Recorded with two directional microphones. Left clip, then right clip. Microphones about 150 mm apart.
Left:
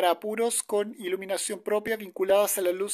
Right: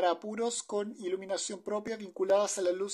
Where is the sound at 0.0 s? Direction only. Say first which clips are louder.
Left 5 dB; 30° left (ahead or behind).